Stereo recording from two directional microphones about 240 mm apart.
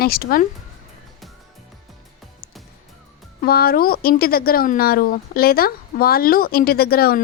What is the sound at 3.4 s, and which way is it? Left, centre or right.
Speech, left.